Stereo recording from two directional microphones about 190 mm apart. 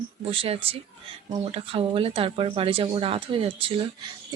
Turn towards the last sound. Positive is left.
turn(degrees=-30)  # may be behind; listen again after turning